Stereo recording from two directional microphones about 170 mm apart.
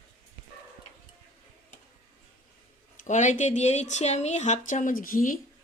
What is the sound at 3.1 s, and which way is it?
Speech, 45° left (ahead or behind).